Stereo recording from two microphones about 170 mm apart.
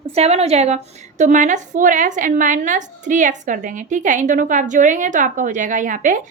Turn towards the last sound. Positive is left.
turn(degrees=-50)  # may be behind; listen again after turning